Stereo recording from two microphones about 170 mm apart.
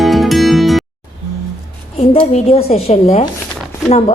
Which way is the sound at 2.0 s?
35° left (ahead or behind).